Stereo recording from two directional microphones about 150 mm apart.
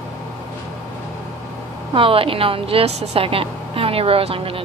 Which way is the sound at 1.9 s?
35° right (ahead or behind).